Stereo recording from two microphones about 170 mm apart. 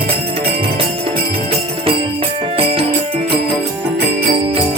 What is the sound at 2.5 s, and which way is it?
Music, 35° right (ahead or behind).